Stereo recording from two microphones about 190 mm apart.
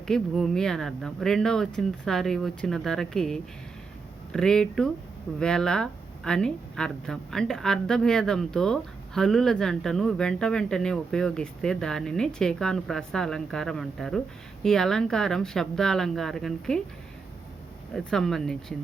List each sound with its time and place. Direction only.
0.1 s speech: centre (ahead or behind)
17.9 s speech: centre (ahead or behind)